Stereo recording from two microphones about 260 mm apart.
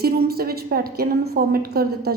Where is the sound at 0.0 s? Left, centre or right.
Right.